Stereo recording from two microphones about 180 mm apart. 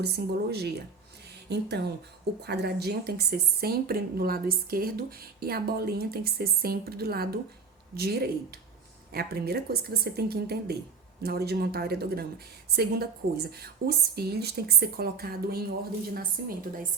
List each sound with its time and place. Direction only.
0.0 s a woman's voice: 65° right (ahead or behind)